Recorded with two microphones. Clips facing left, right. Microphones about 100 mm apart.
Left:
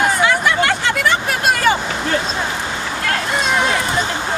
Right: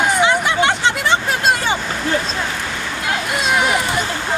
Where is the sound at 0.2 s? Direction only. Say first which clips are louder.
Even; 25° right (ahead or behind).